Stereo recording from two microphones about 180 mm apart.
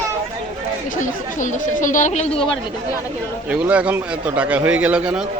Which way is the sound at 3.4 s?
5° right (ahead or behind).